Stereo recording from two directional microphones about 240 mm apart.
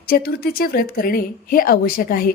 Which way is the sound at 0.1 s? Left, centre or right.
Left.